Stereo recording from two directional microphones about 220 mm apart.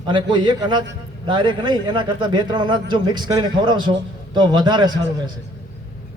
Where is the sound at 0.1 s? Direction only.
20° right (ahead or behind).